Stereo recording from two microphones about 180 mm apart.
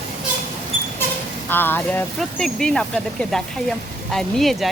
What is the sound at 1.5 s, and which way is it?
Speech, 10° left (ahead or behind).